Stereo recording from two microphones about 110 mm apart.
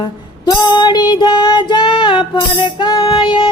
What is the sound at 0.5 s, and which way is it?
Female singing, 40° left (ahead or behind).